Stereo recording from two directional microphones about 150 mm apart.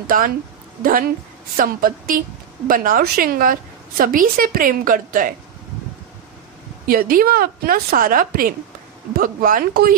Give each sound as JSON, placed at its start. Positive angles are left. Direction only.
{"t": 0.0, "sound": "a woman's voice", "side_deg": -65}
{"t": 6.9, "sound": "a woman's voice", "side_deg": -75}